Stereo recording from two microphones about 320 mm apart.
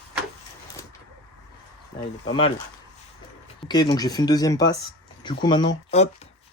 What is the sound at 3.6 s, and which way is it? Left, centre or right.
Speech, centre.